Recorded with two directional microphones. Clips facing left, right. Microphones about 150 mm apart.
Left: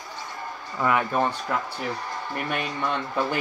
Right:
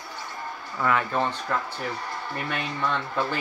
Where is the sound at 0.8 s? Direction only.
10° left (ahead or behind).